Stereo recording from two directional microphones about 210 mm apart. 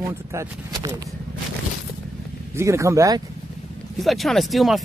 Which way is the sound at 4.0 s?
Centre (ahead or behind).